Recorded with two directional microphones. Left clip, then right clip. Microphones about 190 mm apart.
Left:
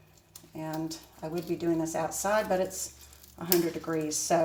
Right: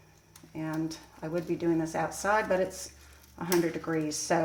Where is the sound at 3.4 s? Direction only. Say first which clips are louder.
Even; 25° right (ahead or behind).